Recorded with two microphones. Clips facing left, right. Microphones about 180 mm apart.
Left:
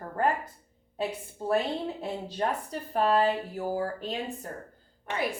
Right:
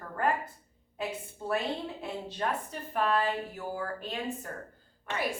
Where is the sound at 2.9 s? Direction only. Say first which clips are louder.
Left 4 dB; 35° left (ahead or behind).